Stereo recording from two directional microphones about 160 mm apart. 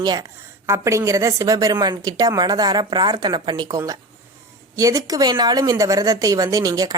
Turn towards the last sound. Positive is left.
turn(degrees=-20)  # may be behind; listen again after turning